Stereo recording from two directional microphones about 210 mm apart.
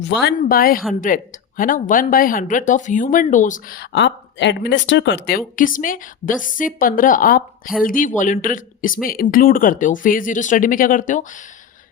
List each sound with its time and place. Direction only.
0.0 s speech: 55° left (ahead or behind)
0.3 s speech: 45° left (ahead or behind)
5.5 s speech: 40° left (ahead or behind)